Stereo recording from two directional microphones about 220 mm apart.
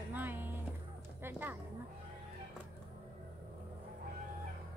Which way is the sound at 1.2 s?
10° right (ahead or behind).